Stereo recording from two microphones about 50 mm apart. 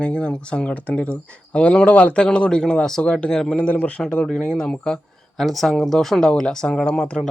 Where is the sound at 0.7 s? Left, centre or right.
Left; by 4.9 s centre.